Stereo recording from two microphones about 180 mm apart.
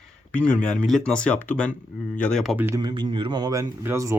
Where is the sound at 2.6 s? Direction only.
20° right (ahead or behind).